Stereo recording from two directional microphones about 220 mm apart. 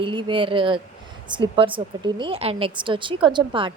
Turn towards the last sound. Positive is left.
turn(degrees=-20)  # may be behind; listen again after turning